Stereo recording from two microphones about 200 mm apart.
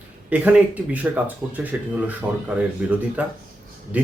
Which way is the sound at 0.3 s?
10° right (ahead or behind).